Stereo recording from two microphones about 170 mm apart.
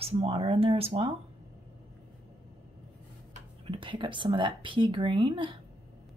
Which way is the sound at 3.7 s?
30° right (ahead or behind).